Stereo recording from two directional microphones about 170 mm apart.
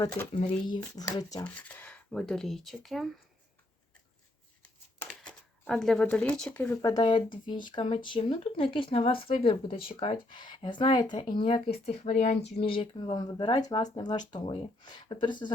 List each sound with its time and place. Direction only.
0.8 s speech: 20° left (ahead or behind)
1.5 s speech: 10° left (ahead or behind)
4.9 s a sound: 5° left (ahead or behind)
6.8 s speech: 25° left (ahead or behind)